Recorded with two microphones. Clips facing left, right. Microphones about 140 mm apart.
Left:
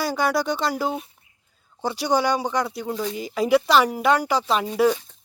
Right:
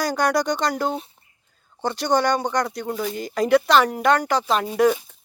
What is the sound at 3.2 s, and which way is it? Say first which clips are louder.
Speech: right 1 dB; 5° left (ahead or behind).